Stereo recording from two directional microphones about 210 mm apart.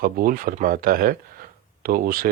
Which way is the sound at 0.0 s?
40° right (ahead or behind).